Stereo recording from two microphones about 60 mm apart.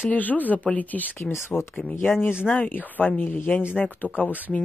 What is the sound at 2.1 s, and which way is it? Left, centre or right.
Speech, centre.